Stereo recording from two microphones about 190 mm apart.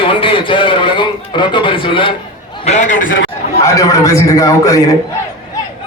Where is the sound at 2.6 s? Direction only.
40° left (ahead or behind).